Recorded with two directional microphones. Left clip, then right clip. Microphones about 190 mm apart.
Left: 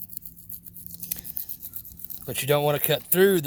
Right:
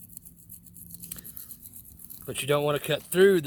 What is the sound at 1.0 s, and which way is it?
Toothbrush, 40° left (ahead or behind).